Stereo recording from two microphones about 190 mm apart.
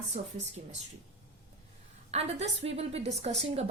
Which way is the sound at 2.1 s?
35° right (ahead or behind).